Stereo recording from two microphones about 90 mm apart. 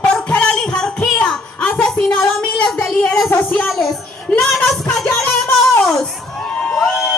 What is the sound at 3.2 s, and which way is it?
Speech, 25° left (ahead or behind).